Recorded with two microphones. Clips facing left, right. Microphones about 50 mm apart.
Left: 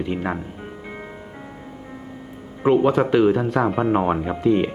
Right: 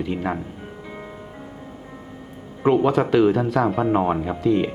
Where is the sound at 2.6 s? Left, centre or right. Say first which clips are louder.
Left 1 dB; centre.